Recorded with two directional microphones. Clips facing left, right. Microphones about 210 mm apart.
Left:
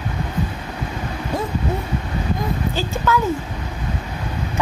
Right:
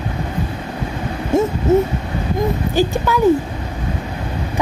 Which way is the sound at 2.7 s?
15° right (ahead or behind).